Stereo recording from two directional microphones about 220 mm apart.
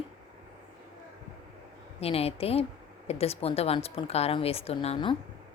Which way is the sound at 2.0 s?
25° left (ahead or behind).